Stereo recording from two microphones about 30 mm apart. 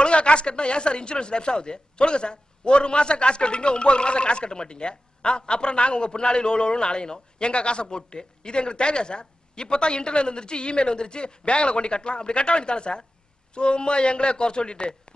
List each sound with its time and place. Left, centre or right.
0.0 s speech: left